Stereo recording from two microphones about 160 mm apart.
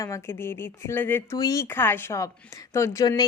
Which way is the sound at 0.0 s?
15° left (ahead or behind).